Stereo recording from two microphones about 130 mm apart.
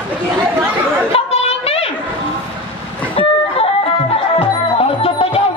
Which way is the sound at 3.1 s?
45° left (ahead or behind).